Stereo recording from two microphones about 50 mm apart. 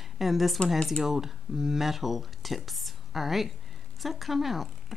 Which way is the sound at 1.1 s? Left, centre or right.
Centre.